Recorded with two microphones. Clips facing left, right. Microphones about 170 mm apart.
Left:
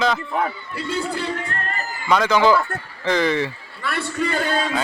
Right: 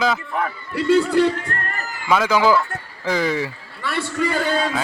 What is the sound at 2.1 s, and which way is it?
A man's voice, 5° right (ahead or behind).